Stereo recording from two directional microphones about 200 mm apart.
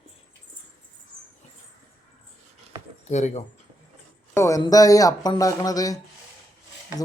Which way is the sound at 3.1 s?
35° left (ahead or behind).